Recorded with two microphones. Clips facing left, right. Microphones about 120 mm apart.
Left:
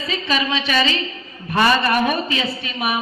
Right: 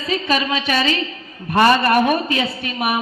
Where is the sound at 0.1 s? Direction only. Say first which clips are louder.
Right 3 dB; 45° right (ahead or behind).